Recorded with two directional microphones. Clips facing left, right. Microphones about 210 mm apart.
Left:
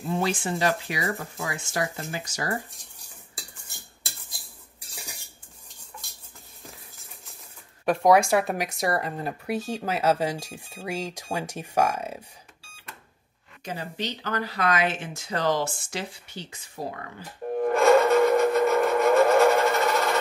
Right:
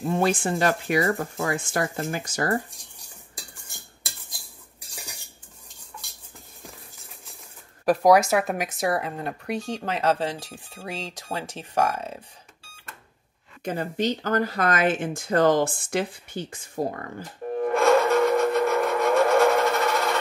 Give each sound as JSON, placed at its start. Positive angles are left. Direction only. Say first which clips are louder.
{"t": 0.2, "sound": "speech", "louder": "right 3 dB", "side_deg": -50}
{"t": 7.8, "sound": "speech", "louder": "right 2 dB", "side_deg": 0}
{"t": 13.7, "sound": "speech", "louder": "right 7 dB", "side_deg": -50}
{"t": 17.6, "sound": "a sound", "louder": "left 1 dB", "side_deg": 5}